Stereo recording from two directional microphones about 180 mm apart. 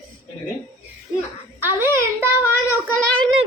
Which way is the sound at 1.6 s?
10° right (ahead or behind).